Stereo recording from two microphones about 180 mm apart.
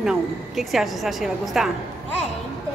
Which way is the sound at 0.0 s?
Centre (ahead or behind).